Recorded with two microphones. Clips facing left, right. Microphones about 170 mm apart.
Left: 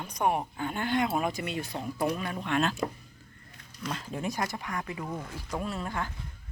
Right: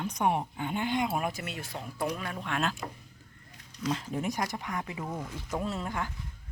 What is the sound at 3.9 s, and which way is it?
Speech, 20° right (ahead or behind).